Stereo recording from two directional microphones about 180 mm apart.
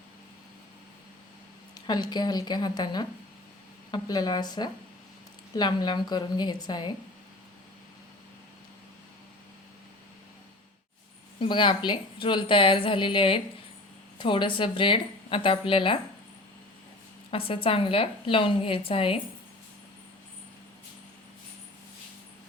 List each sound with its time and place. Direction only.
1.7 s a woman's voice: 20° left (ahead or behind)
11.3 s a woman's voice: 25° left (ahead or behind)
17.3 s a woman's voice: 30° left (ahead or behind)